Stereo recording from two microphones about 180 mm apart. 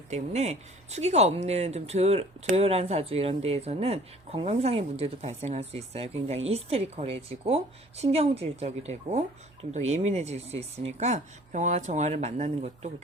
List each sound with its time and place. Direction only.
0.1 s speech: 40° right (ahead or behind)